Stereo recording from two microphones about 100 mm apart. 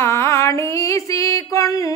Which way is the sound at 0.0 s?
25° left (ahead or behind).